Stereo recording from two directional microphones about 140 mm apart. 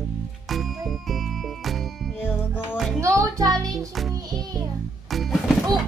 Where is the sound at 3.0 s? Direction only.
20° right (ahead or behind).